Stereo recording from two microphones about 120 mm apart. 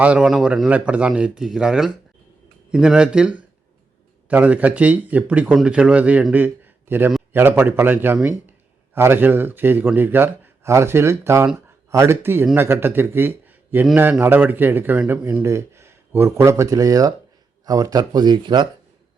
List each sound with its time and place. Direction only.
0.0 s a man's voice: 10° right (ahead or behind)
6.3 s a sound: 15° right (ahead or behind)
7.3 s a man's voice: 20° right (ahead or behind); by 18.7 s 40° right (ahead or behind)